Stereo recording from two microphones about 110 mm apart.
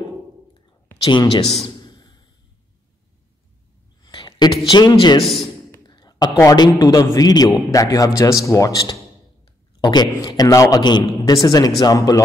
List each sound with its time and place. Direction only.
1.0 s speech: 50° left (ahead or behind)
1.8 s a sound: 40° left (ahead or behind)
4.0 s speech: 40° left (ahead or behind)
5.2 s a man's voice: centre (ahead or behind)
5.9 s a sound: 40° left (ahead or behind)
6.5 s a man's voice: 35° left (ahead or behind)